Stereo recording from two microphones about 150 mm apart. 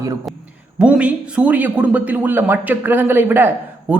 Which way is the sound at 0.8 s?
10° right (ahead or behind).